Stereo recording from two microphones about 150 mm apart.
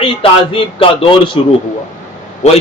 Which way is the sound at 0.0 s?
35° left (ahead or behind).